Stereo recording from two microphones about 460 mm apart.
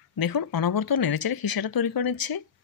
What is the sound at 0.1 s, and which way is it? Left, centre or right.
Speech, left.